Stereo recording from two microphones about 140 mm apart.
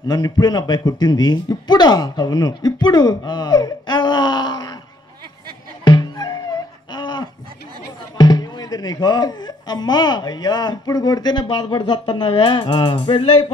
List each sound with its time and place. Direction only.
0.1 s speech: 35° left (ahead or behind)
5.9 s music: 30° left (ahead or behind)
6.9 s a sound: 30° left (ahead or behind)
8.2 s speech: 30° left (ahead or behind)